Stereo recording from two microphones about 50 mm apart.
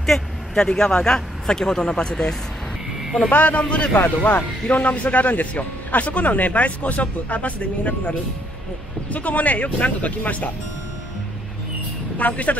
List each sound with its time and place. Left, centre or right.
0.0 s speech: centre
3.3 s speech: left
12.2 s speech: left